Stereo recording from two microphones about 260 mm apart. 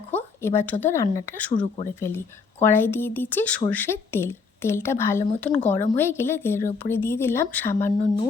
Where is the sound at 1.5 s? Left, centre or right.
Left.